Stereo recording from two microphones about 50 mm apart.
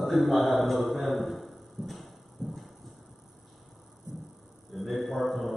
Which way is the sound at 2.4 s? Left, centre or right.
Centre.